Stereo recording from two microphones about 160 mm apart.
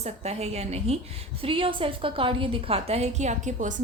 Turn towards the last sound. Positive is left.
turn(degrees=-50)  # may be behind; listen again after turning